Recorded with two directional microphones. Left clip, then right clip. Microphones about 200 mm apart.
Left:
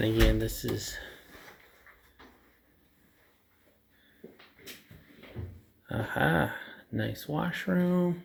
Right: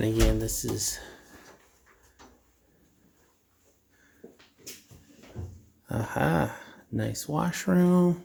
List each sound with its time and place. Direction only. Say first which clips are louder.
0.0 s speech: even; 20° right (ahead or behind)
5.8 s speech: even; 25° right (ahead or behind)